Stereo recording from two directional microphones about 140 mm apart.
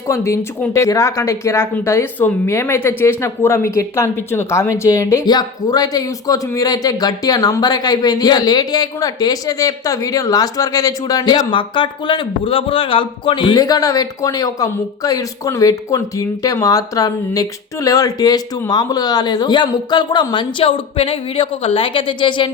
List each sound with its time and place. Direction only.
0.1 s speech: 20° left (ahead or behind); by 22.4 s 35° left (ahead or behind)